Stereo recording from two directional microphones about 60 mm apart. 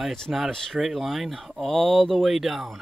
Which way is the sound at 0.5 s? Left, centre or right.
Centre.